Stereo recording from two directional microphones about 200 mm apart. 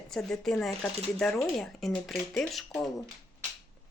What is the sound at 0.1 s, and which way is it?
Speech, centre (ahead or behind).